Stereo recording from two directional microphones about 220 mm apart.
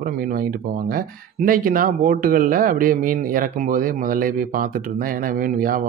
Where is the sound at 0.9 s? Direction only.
40° right (ahead or behind).